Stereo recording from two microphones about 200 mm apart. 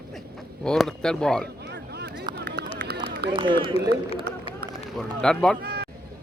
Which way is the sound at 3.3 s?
25° right (ahead or behind).